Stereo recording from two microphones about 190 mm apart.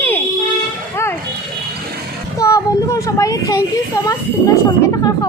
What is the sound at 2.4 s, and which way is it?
Child singing, 15° left (ahead or behind).